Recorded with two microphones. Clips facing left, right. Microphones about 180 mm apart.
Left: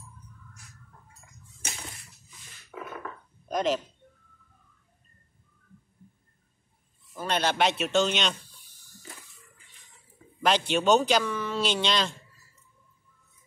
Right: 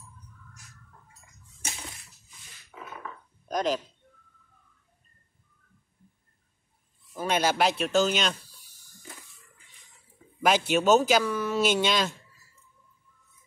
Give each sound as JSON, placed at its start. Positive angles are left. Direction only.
{"t": 2.7, "sound": "burping", "side_deg": 65}
{"t": 3.4, "sound": "speech", "side_deg": 0}
{"t": 7.2, "sound": "speech", "side_deg": -10}
{"t": 10.4, "sound": "speech", "side_deg": -10}